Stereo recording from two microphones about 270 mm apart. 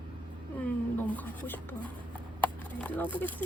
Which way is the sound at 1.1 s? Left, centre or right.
Centre.